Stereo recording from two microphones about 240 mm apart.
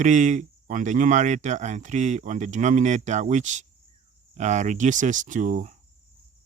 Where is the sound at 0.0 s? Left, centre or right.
Right.